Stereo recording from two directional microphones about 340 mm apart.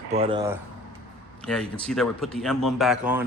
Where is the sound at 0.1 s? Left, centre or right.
Centre.